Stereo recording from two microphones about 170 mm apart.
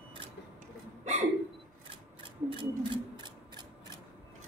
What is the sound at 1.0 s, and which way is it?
Hiccup, 40° right (ahead or behind).